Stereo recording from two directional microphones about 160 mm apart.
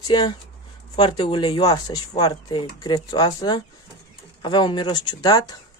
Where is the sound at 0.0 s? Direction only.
25° left (ahead or behind).